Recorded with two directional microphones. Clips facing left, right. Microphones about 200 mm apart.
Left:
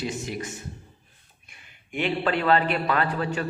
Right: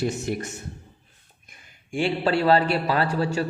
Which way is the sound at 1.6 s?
30° right (ahead or behind).